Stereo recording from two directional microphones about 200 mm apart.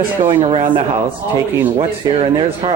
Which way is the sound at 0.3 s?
30° right (ahead or behind).